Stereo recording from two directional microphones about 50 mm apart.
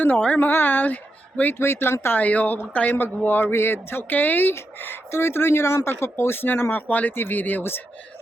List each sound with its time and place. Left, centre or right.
0.3 s speech: left
1.5 s speech: left
2.1 s speech: left